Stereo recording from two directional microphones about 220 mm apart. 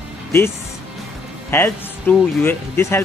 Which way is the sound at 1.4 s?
10° left (ahead or behind).